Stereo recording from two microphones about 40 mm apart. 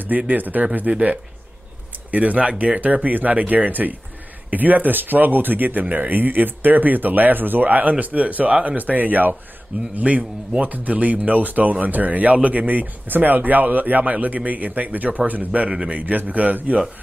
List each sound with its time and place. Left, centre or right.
0.3 s speech: right